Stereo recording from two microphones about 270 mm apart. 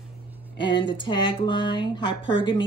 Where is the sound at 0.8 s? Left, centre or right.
Centre.